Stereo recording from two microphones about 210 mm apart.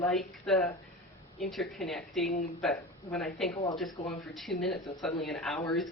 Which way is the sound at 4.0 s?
30° left (ahead or behind).